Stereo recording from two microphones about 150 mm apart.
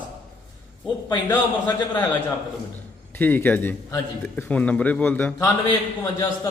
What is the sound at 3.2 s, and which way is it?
A man's voice, 10° left (ahead or behind).